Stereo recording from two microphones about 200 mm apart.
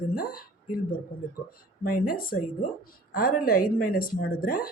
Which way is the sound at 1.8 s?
45° left (ahead or behind).